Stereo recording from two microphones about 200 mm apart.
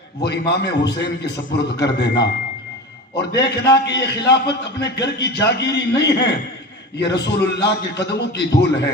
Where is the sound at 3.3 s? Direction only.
60° left (ahead or behind).